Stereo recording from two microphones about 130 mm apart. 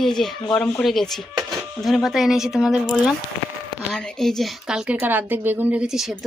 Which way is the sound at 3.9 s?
5° left (ahead or behind).